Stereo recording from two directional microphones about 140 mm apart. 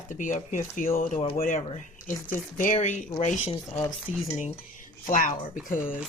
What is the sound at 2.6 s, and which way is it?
Speech, 65° left (ahead or behind).